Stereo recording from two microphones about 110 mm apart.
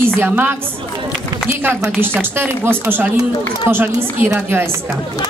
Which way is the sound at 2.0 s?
20° right (ahead or behind).